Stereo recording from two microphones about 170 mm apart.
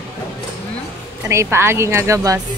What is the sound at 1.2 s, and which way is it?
A woman's voice, 15° right (ahead or behind).